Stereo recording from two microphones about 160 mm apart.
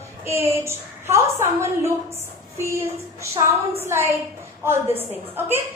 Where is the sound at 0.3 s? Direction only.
15° right (ahead or behind).